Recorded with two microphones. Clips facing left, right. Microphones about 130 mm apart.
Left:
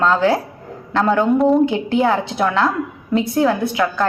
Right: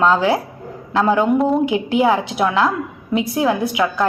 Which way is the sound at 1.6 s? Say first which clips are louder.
Even; 10° right (ahead or behind).